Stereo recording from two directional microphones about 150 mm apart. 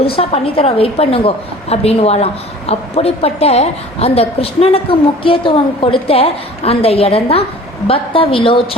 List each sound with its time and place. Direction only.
0.0 s a woman's voice: 40° left (ahead or behind)